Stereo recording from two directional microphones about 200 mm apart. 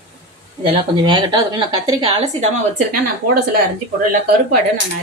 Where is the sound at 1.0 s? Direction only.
20° right (ahead or behind).